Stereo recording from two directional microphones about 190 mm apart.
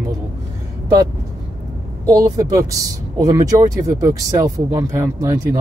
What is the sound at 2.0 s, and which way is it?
Speech, 20° right (ahead or behind).